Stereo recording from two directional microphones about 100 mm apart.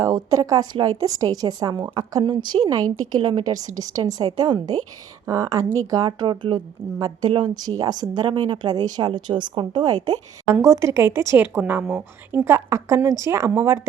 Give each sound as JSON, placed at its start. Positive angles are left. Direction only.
{"t": 0.0, "sound": "a woman's voice", "side_deg": -40}
{"t": 5.2, "sound": "speech", "side_deg": -35}
{"t": 6.1, "sound": "speech", "side_deg": -55}
{"t": 10.5, "sound": "a woman's voice", "side_deg": -30}